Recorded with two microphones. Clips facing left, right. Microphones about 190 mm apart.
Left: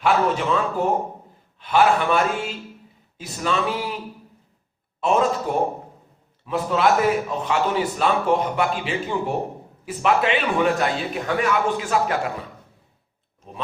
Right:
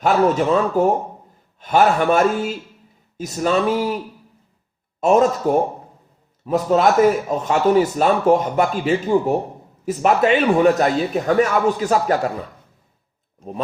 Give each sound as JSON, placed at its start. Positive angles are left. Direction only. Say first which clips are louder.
{"t": 0.0, "sound": "a man's voice", "louder": "right 4 dB", "side_deg": -40}
{"t": 6.4, "sound": "a man's voice", "louder": "right 5 dB", "side_deg": -40}